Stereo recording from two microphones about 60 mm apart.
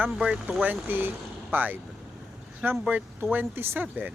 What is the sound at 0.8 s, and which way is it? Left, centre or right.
Speech, right.